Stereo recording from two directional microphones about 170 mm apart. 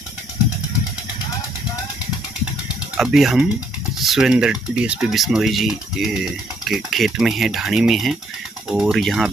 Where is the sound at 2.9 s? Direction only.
Centre (ahead or behind).